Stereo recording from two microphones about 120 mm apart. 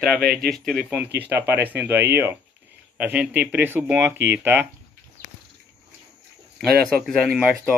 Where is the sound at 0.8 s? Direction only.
10° right (ahead or behind).